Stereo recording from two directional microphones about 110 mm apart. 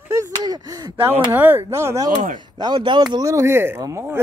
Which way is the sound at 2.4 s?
40° right (ahead or behind).